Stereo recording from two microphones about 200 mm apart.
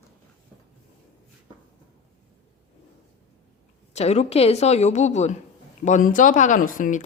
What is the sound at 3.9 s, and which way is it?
Speech, 35° left (ahead or behind).